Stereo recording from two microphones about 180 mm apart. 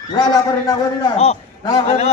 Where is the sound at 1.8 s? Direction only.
40° left (ahead or behind).